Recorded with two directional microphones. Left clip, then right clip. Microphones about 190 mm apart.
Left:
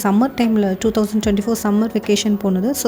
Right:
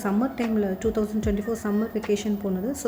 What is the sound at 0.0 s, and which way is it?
Speech, 50° left (ahead or behind).